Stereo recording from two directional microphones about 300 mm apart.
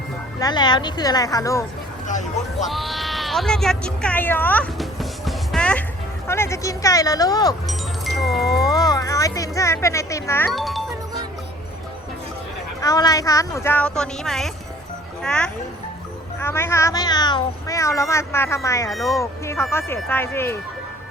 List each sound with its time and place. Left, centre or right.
0.3 s speech: centre
2.0 s vehicle: left
2.6 s a sound: centre
6.2 s speech: centre
7.7 s music: centre
8.4 s speech: centre
12.8 s speech: centre
18.9 s speech: centre